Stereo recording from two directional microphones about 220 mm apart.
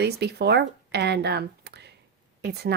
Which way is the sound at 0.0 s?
50° right (ahead or behind).